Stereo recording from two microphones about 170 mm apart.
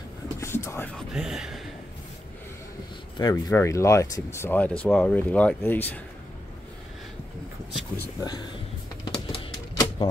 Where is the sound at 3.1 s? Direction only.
25° left (ahead or behind).